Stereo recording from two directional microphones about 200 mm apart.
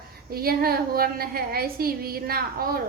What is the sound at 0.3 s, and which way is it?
A woman's voice, 50° right (ahead or behind).